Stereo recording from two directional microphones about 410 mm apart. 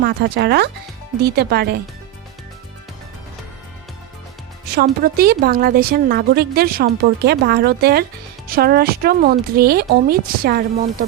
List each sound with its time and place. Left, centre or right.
0.0 s a woman's voice: right
5.0 s a woman's voice: right